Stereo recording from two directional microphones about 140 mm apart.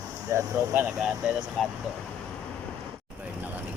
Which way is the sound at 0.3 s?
20° right (ahead or behind).